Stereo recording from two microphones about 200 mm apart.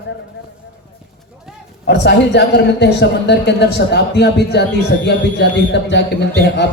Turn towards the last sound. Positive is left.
turn(degrees=60)  # may be behind; listen again after turning